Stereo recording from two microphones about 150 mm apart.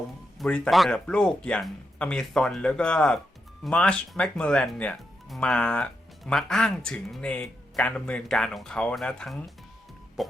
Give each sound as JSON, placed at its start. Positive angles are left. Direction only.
{"t": 0.3, "sound": "speech", "side_deg": 5}